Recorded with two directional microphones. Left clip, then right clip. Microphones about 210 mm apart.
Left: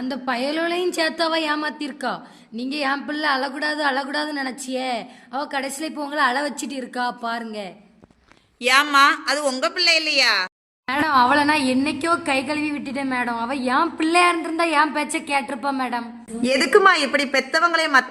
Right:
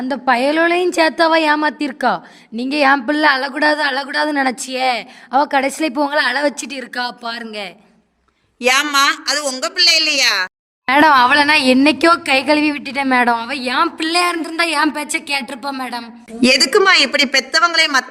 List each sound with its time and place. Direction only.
0.0 s a woman's voice: 45° right (ahead or behind)
9.5 s speech: centre (ahead or behind)
9.7 s a woman's voice: 45° right (ahead or behind)
14.2 s speech: centre (ahead or behind)
15.1 s speech: 55° right (ahead or behind)
16.7 s a woman's voice: 40° right (ahead or behind)